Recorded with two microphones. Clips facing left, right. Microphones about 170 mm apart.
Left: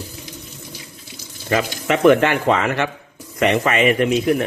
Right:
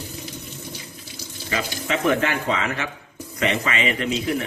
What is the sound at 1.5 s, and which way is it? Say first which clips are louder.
A man's voice: left 7 dB; 60° left (ahead or behind).